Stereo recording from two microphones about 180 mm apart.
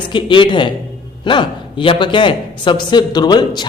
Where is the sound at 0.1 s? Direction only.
25° left (ahead or behind).